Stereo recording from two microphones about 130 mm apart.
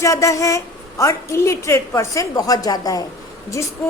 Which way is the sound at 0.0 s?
25° left (ahead or behind).